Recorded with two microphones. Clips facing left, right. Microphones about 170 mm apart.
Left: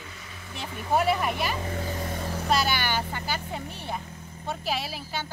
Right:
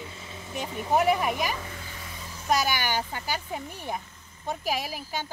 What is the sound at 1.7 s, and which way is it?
Vehicle, 45° left (ahead or behind).